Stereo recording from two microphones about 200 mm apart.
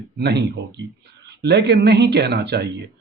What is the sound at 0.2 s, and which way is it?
Speech, 55° right (ahead or behind).